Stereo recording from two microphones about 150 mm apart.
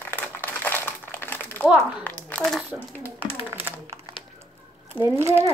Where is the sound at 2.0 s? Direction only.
10° left (ahead or behind).